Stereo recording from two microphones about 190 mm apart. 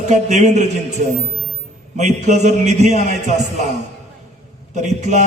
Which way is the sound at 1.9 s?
40° right (ahead or behind).